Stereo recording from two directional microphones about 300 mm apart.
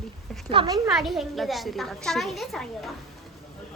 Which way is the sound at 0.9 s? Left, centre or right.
Centre.